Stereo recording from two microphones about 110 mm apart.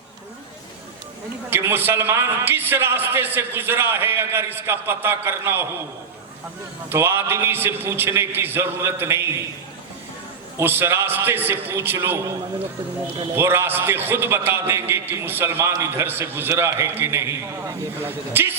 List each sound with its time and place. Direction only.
1.5 s a man's voice: 20° right (ahead or behind)
6.9 s a man's voice: 20° right (ahead or behind)
10.6 s a man's voice: 20° right (ahead or behind)
13.3 s a man's voice: 20° right (ahead or behind)